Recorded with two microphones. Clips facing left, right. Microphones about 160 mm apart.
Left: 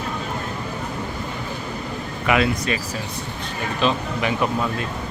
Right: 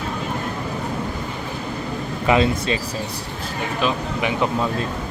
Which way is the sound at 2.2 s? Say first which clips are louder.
Right 2 dB; 30° right (ahead or behind).